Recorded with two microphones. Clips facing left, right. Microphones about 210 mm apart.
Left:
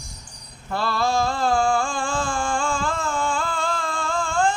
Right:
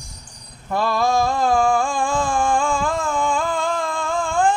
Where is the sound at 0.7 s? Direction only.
15° right (ahead or behind).